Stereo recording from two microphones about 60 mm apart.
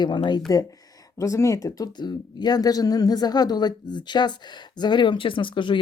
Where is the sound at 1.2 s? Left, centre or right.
Left.